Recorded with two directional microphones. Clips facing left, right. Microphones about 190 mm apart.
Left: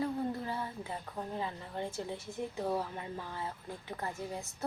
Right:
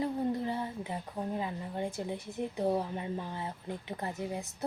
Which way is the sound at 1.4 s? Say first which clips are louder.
Right 3 dB; 15° right (ahead or behind).